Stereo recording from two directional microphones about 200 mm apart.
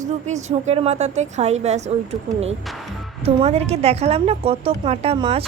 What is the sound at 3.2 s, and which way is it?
A woman's voice, 30° right (ahead or behind).